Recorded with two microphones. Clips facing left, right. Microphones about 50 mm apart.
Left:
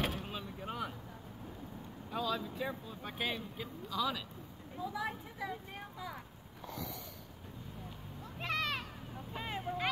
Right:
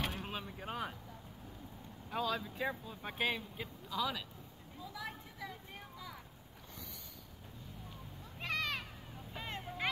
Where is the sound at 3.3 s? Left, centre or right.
Right.